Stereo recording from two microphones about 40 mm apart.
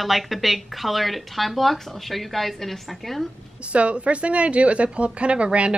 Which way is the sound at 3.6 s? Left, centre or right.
Right.